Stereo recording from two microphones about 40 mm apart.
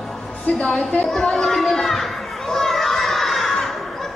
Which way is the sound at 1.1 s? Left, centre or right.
Centre.